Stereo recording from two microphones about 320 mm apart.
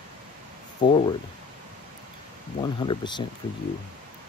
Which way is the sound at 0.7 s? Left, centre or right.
Centre.